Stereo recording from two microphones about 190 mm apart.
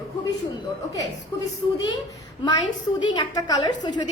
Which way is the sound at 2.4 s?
25° left (ahead or behind).